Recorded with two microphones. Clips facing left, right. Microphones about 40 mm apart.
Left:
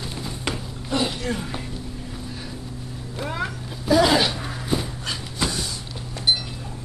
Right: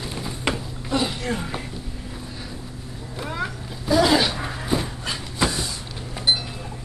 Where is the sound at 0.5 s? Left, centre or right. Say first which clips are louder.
Right 1 dB; centre.